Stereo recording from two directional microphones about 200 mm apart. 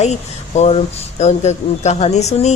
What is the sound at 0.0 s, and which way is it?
Speech, 35° left (ahead or behind).